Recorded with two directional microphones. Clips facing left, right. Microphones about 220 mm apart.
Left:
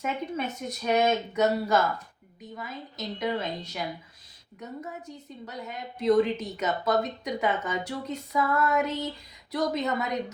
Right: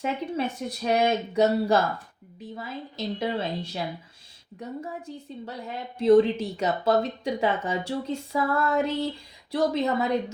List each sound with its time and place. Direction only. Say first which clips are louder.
0.0 s a woman's voice: right 3 dB; 30° right (ahead or behind)